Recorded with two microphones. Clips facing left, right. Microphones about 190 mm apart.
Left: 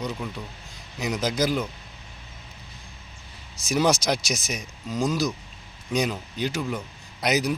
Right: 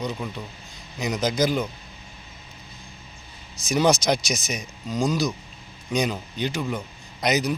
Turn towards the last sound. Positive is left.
turn(degrees=5)  # may be behind; listen again after turning